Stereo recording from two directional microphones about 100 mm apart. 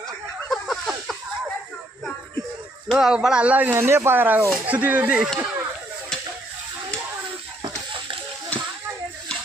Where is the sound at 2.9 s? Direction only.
5° right (ahead or behind).